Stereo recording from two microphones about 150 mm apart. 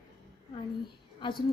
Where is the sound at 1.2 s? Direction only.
35° left (ahead or behind).